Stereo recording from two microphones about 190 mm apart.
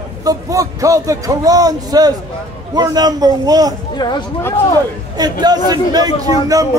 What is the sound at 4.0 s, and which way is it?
Speech, 20° left (ahead or behind).